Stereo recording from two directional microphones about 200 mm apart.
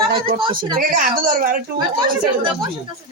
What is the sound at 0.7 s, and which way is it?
Speech, 40° right (ahead or behind).